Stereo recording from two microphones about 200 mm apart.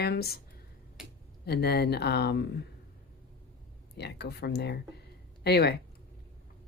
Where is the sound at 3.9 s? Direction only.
55° left (ahead or behind).